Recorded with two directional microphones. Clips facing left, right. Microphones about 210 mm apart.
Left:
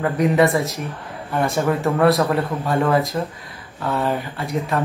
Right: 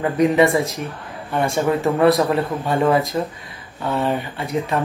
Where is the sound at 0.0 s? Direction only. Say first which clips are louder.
Right 1 dB; centre (ahead or behind).